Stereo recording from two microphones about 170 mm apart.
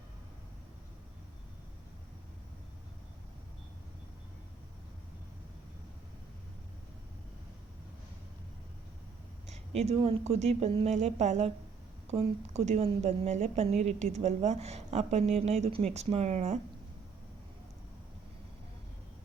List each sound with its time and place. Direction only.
9.5 s a woman's voice: 40° right (ahead or behind)